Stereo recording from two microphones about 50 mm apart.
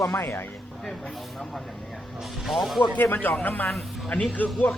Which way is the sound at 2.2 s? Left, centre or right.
Centre.